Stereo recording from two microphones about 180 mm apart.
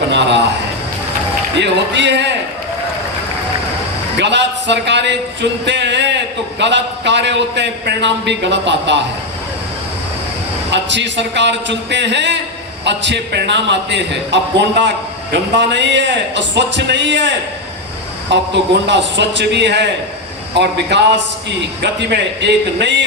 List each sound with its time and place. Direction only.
0.1 s a man's voice: 70° right (ahead or behind)
1.5 s a man's voice: 80° right
4.2 s a man's voice: 75° right (ahead or behind)
10.7 s a man's voice: 80° right